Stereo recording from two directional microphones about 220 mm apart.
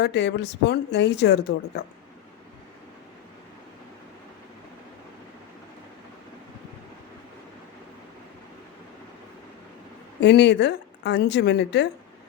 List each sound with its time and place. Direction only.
0.0 s speech: 50° left (ahead or behind)
10.2 s speech: 50° left (ahead or behind)